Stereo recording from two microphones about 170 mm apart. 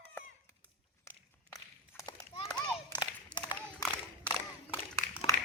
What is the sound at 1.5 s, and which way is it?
Walk, 20° left (ahead or behind).